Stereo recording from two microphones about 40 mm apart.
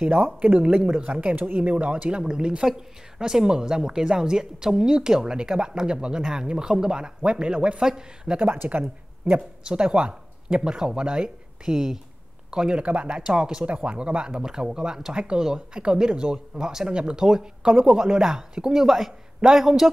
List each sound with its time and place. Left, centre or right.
0.2 s speech: right
1.3 s speech: right
8.5 s speech: right
9.7 s speech: right
12.8 s speech: right
13.2 s speech: centre
13.7 s speech: right; by 19.9 s centre